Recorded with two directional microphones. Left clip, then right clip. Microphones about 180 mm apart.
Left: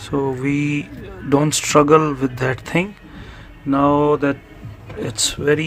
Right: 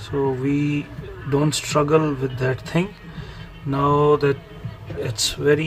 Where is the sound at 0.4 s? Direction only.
60° left (ahead or behind).